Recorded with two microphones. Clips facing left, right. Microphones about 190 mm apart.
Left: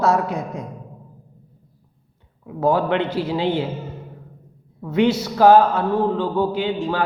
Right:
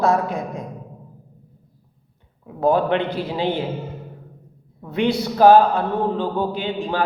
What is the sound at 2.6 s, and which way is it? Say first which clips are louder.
Speech: right 1 dB; 20° right (ahead or behind).